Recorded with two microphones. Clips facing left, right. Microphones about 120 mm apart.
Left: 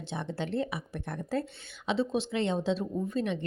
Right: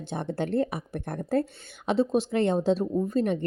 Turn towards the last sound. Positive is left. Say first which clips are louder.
# right 6 dB
turn(degrees=-45)  # may be behind; listen again after turning